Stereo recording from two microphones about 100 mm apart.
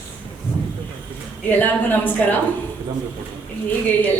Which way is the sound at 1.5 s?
20° left (ahead or behind).